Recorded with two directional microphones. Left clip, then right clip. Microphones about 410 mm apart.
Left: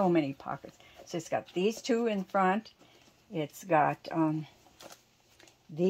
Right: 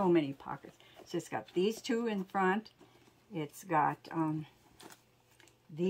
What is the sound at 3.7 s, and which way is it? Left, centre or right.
Speech, centre.